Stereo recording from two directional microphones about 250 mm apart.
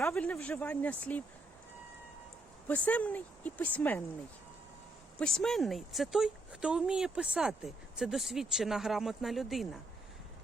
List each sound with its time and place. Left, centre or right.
0.0 s speech: centre
2.6 s speech: centre
5.2 s speech: centre